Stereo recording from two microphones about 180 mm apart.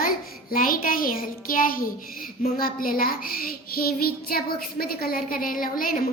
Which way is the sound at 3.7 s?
55° left (ahead or behind).